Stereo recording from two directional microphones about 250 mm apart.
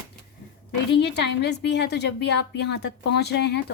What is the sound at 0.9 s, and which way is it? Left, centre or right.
A woman's voice, left.